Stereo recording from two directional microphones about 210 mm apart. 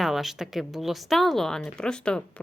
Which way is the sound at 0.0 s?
Centre (ahead or behind).